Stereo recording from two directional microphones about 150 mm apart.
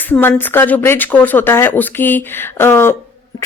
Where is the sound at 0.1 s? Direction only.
15° left (ahead or behind).